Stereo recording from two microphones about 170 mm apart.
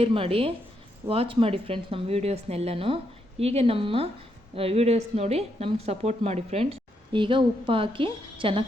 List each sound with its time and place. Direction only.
0.0 s a woman's voice: 35° right (ahead or behind)